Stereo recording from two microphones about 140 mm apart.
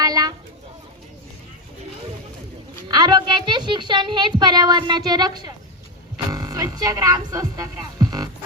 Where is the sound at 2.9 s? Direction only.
30° right (ahead or behind).